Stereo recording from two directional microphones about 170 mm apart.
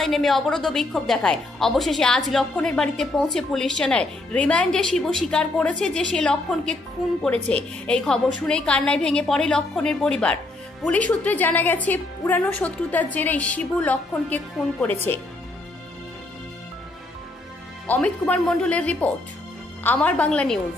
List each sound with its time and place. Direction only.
0.0 s a woman's voice: centre (ahead or behind)
17.8 s a woman's voice: 10° left (ahead or behind)